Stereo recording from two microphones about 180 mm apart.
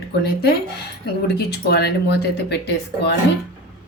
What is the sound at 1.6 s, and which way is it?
Speech, 65° left (ahead or behind).